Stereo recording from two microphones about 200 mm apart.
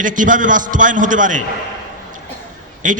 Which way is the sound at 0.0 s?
40° right (ahead or behind).